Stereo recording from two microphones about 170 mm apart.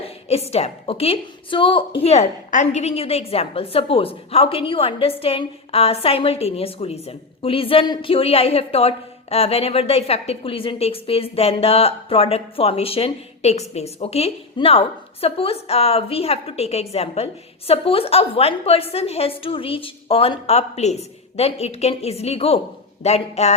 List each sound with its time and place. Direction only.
0.0 s a woman's voice: 35° left (ahead or behind)